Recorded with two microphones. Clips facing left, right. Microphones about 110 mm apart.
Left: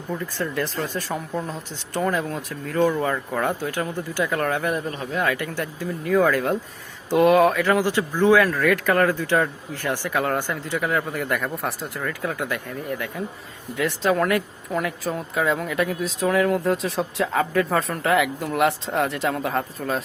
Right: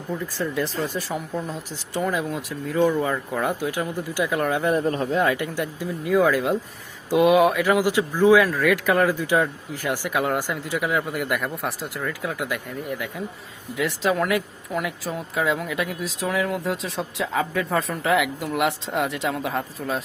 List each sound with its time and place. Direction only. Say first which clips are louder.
0.1 s speech: even; centre (ahead or behind)
5.1 s speech: left 2 dB; 25° right (ahead or behind); by 20.0 s centre (ahead or behind)